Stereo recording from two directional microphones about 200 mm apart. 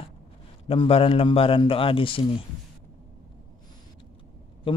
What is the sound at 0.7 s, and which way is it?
Speech, 30° left (ahead or behind).